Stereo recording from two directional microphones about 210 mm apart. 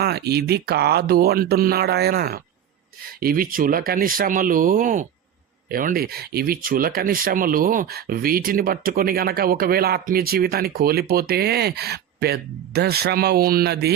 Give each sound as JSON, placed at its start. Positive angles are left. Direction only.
{"t": 0.0, "sound": "speech", "side_deg": -50}